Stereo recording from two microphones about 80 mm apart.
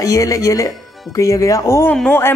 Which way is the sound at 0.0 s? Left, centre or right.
Left.